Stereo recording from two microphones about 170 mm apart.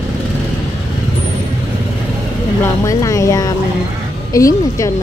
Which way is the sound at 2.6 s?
20° left (ahead or behind).